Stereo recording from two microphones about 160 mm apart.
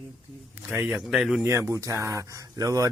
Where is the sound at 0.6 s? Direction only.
10° right (ahead or behind).